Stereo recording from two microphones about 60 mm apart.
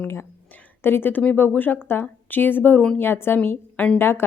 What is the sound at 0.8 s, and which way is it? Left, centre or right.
A woman's voice, left.